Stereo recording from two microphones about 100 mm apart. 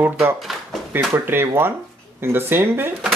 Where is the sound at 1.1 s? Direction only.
20° right (ahead or behind).